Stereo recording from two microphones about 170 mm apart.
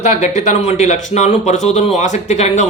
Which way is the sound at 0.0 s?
45° left (ahead or behind).